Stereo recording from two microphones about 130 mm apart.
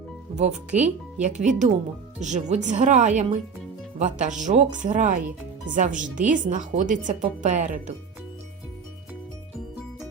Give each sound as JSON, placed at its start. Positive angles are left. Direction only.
{"t": 0.3, "sound": "a woman's voice", "side_deg": -60}